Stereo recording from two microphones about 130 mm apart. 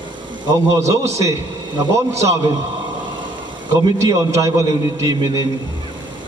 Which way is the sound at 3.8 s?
25° right (ahead or behind).